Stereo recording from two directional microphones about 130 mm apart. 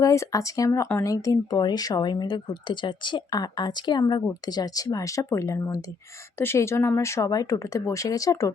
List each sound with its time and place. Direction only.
0.0 s speech: 25° left (ahead or behind)